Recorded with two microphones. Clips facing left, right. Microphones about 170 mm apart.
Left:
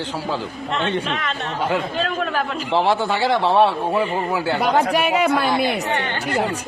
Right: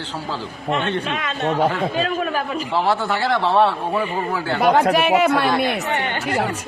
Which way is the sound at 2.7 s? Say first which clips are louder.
Left 2 dB; 15° left (ahead or behind).